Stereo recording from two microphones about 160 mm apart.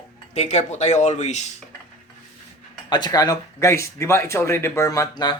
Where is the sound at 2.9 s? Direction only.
25° left (ahead or behind).